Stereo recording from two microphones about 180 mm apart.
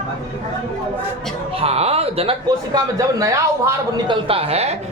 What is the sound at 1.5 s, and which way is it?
A man's voice, 35° right (ahead or behind).